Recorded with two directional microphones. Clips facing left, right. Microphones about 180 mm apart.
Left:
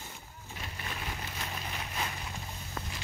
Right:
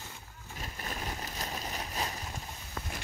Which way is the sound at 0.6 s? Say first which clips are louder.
Right 2 dB; 40° right (ahead or behind).